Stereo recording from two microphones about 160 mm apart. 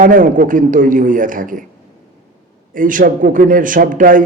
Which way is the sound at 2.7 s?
55° right (ahead or behind).